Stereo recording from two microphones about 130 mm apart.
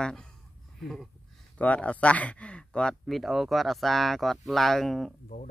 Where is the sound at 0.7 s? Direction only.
Centre (ahead or behind).